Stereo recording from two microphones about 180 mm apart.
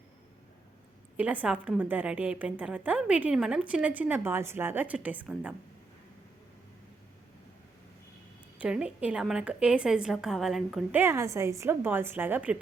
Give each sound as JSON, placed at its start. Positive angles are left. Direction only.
{"t": 1.1, "sound": "a woman's voice", "side_deg": -10}
{"t": 8.6, "sound": "a woman's voice", "side_deg": -5}
{"t": 11.0, "sound": "a woman's voice", "side_deg": -15}